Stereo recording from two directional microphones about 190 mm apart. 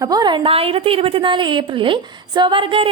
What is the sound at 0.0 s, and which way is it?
A woman's voice, 20° right (ahead or behind).